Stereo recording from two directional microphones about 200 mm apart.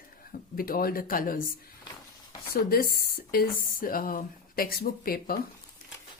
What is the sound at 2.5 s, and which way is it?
A woman's voice, 50° left (ahead or behind).